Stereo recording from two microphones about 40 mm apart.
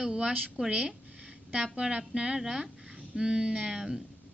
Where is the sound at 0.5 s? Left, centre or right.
Right.